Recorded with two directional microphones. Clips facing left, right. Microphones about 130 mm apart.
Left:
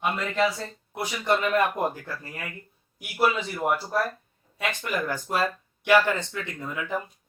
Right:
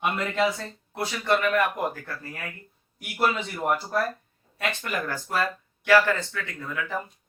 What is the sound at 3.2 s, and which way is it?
A man's voice, 10° left (ahead or behind).